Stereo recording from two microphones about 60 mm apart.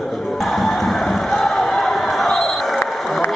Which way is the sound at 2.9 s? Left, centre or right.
Centre.